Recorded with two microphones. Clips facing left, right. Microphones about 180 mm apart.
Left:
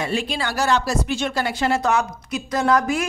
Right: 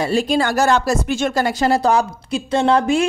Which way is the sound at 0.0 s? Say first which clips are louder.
Right 7 dB; 40° right (ahead or behind).